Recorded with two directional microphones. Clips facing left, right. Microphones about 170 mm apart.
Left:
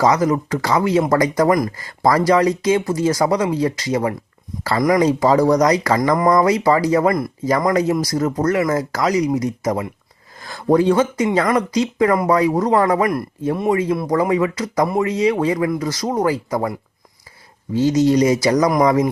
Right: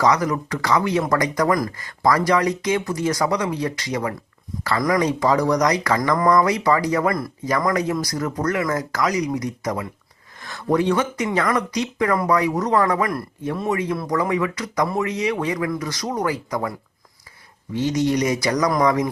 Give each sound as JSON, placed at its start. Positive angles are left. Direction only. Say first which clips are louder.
{"t": 0.0, "sound": "speech", "louder": "left 3 dB", "side_deg": 25}
{"t": 17.7, "sound": "speech", "louder": "left 6 dB", "side_deg": 25}